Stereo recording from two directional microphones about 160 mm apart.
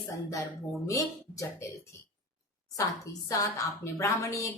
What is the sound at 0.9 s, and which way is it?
Speech, 20° left (ahead or behind).